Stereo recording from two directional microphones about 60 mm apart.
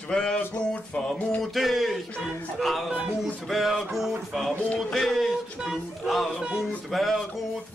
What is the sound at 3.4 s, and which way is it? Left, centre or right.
Speech, centre.